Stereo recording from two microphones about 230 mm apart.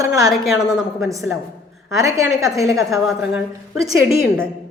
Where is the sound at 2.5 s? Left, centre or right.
Centre.